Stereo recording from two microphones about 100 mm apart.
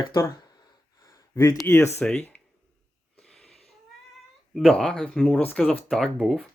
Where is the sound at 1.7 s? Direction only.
30° left (ahead or behind).